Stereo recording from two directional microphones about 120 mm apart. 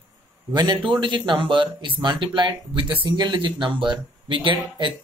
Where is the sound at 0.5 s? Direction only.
35° right (ahead or behind).